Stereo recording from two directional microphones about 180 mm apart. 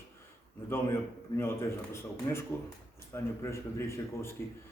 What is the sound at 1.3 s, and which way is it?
A man's voice, 15° left (ahead or behind).